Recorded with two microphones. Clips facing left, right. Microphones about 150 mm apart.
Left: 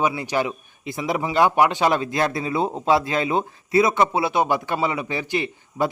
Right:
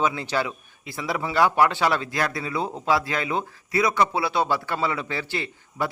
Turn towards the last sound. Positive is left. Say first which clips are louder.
# left 5 dB
turn(degrees=20)  # may be behind; listen again after turning